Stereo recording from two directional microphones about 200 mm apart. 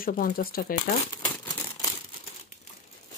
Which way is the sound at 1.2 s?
20° left (ahead or behind).